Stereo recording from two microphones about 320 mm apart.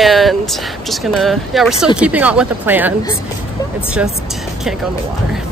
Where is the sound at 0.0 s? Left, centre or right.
Centre.